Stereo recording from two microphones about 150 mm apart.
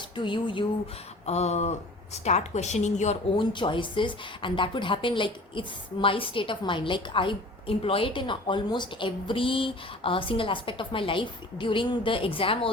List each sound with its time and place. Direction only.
0.2 s speech: 30° left (ahead or behind)
1.2 s a woman's voice: 45° left (ahead or behind)
3.3 s speech: 30° left (ahead or behind)